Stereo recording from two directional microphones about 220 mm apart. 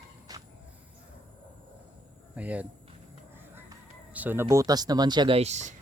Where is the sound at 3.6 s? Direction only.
10° right (ahead or behind).